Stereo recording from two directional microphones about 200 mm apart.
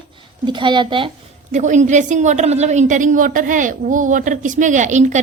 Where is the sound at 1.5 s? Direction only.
35° right (ahead or behind).